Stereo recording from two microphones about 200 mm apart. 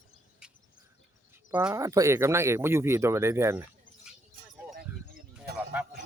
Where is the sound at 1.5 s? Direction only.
5° right (ahead or behind).